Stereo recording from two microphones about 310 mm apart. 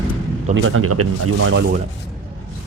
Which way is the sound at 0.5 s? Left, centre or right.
Right.